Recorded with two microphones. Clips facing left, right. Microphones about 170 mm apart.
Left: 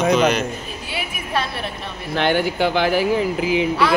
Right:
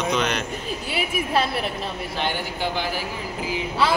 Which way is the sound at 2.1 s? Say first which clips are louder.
Left 12 dB; 70° left (ahead or behind).